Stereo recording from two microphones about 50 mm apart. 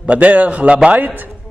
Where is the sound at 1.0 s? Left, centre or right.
Right.